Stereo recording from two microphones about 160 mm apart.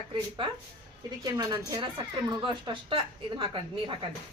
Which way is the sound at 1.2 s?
25° right (ahead or behind).